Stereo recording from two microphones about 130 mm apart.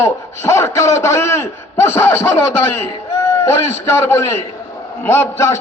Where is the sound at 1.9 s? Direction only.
20° left (ahead or behind).